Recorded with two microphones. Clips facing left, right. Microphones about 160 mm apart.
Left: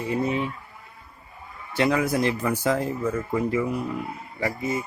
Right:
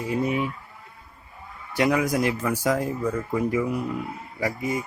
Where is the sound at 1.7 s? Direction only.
15° right (ahead or behind).